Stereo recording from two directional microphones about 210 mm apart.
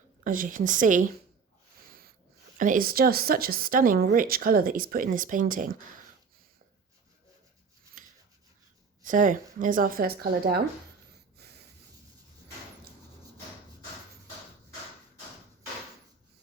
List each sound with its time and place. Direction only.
0.3 s speech: 40° right (ahead or behind)
1.9 s a sound: 45° right (ahead or behind)
2.6 s speech: 40° right (ahead or behind)
8.0 s rub: 40° right (ahead or behind)
9.0 s speech: 40° right (ahead or behind)
11.3 s snort: 50° right (ahead or behind)